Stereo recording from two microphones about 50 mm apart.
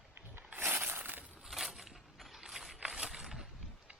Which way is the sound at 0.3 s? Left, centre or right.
Right.